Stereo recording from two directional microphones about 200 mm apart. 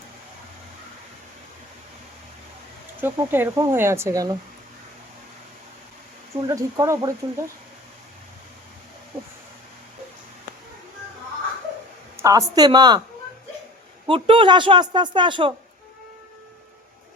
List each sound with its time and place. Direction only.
3.0 s speech: 10° right (ahead or behind)
6.3 s speech: 15° right (ahead or behind)
12.1 s a woman's voice: 15° right (ahead or behind)
14.1 s a woman's voice: 25° right (ahead or behind)